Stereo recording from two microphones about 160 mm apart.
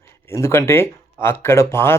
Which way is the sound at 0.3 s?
15° left (ahead or behind).